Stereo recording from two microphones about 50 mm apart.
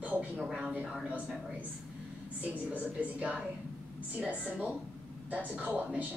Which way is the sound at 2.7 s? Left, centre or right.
Right.